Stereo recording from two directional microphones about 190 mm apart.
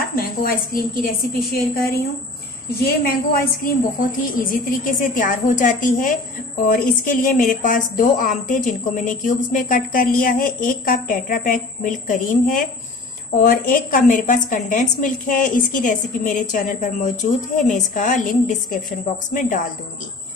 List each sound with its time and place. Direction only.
0.1 s a woman's voice: 50° left (ahead or behind)